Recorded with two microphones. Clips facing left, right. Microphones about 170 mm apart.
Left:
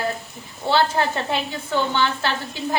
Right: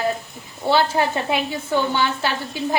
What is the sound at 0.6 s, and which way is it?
A woman's voice, 15° right (ahead or behind).